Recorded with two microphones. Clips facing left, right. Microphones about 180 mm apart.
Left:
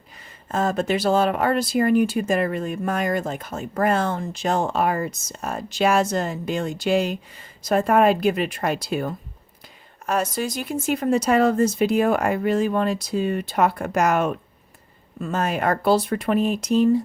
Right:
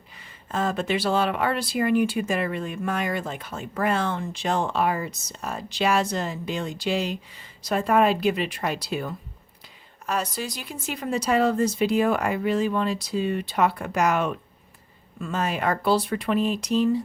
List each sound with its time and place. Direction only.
0.5 s speech: 45° left (ahead or behind)